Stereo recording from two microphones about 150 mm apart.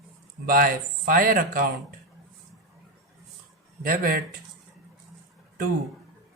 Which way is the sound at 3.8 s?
70° right (ahead or behind).